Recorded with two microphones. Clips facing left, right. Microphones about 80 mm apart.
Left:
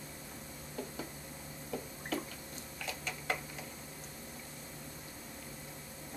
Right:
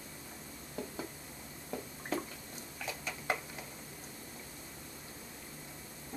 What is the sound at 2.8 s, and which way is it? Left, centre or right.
Tick-tock, right.